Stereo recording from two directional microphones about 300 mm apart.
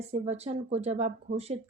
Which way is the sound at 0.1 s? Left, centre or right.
Right.